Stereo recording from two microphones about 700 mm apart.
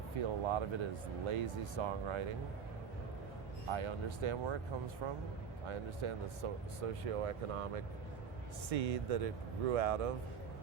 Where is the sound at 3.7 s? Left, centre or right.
Right.